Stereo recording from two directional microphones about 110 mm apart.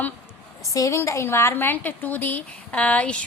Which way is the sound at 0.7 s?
30° left (ahead or behind).